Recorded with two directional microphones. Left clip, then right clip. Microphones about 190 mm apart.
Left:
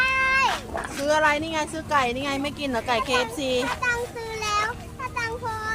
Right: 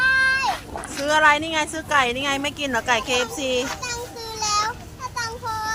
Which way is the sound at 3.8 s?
30° left (ahead or behind).